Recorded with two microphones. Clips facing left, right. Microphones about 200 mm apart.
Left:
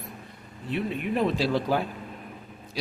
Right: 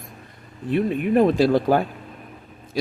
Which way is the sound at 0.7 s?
50° right (ahead or behind).